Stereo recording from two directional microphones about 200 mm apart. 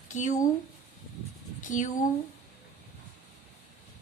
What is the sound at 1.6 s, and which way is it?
Speech, 40° left (ahead or behind).